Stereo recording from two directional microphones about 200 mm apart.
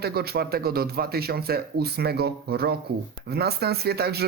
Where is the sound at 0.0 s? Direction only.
50° right (ahead or behind).